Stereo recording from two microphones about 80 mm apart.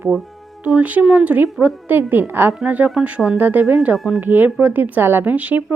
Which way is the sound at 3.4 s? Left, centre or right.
Right.